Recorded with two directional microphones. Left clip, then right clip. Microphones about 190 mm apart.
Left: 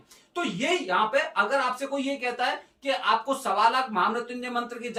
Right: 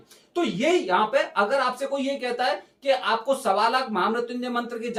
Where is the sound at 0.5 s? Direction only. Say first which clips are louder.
Right 3 dB; 15° right (ahead or behind).